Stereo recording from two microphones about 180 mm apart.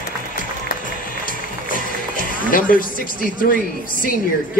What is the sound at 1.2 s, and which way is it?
Music, 50° left (ahead or behind).